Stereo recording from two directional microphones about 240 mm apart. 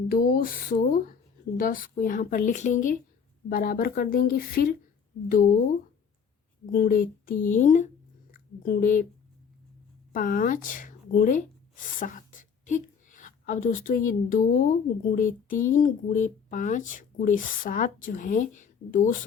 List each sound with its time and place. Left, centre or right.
0.1 s a woman's voice: left
6.7 s a woman's voice: left
10.1 s a woman's voice: left